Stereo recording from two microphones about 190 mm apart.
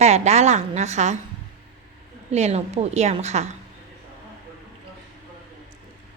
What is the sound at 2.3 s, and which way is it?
A woman's voice, 35° right (ahead or behind).